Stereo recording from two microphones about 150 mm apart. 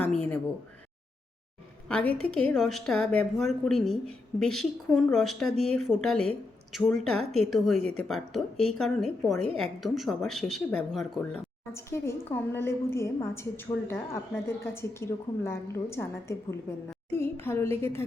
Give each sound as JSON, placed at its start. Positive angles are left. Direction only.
{"t": 0.0, "sound": "a sound", "side_deg": 10}
{"t": 1.9, "sound": "a woman's voice", "side_deg": 10}
{"t": 11.7, "sound": "a woman's voice", "side_deg": 15}